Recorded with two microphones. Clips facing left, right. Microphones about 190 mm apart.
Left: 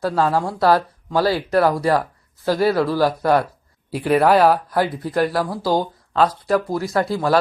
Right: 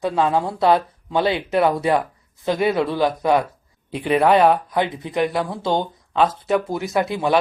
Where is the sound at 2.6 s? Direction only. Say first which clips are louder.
Left 2 dB; 20° right (ahead or behind).